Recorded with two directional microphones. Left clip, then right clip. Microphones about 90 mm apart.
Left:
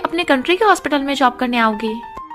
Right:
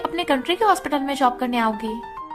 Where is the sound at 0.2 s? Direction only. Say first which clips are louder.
Left 5 dB; 45° left (ahead or behind).